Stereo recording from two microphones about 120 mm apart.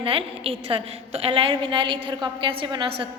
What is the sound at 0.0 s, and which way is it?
A woman's voice, 50° right (ahead or behind).